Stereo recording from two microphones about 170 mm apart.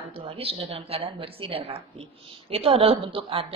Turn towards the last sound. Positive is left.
turn(degrees=-35)  # may be behind; listen again after turning